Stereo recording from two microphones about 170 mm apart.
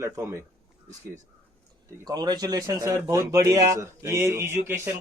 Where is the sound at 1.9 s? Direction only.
25° right (ahead or behind).